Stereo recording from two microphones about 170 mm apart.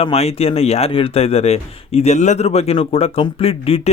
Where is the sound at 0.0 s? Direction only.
35° left (ahead or behind).